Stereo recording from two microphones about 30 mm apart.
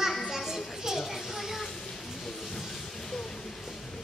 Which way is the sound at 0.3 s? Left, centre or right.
Centre.